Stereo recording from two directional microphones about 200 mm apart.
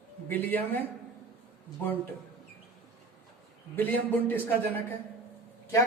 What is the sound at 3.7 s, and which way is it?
A man's voice, 10° left (ahead or behind).